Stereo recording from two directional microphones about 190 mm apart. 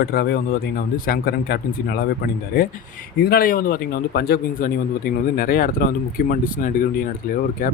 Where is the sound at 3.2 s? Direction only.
55° left (ahead or behind).